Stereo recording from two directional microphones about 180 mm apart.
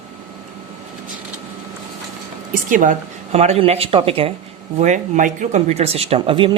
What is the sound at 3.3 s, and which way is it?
Speech, 35° right (ahead or behind).